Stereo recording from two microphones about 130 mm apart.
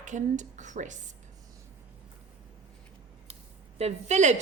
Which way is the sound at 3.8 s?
60° right (ahead or behind).